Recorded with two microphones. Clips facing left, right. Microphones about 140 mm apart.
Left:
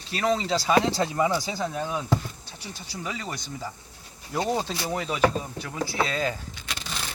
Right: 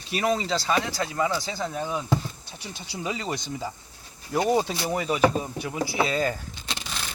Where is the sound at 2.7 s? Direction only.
20° right (ahead or behind).